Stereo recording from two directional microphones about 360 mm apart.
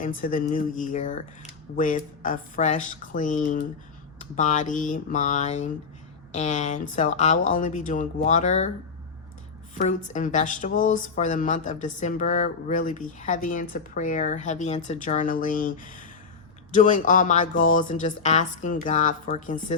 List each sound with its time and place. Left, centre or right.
0.0 s speech: left
9.7 s speech: left